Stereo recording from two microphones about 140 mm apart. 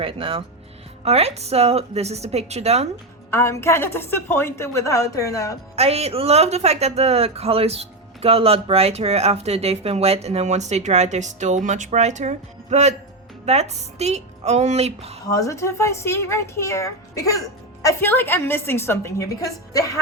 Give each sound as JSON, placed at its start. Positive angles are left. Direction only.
{"t": 0.0, "sound": "speech", "side_deg": -40}
{"t": 3.2, "sound": "a woman's voice", "side_deg": 20}
{"t": 5.7, "sound": "speech", "side_deg": -50}
{"t": 15.3, "sound": "a woman's voice", "side_deg": 20}